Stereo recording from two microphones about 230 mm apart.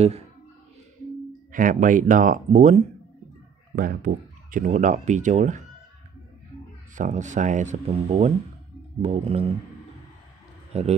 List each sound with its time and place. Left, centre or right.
1.5 s speech: right
7.0 s speech: right
10.7 s speech: right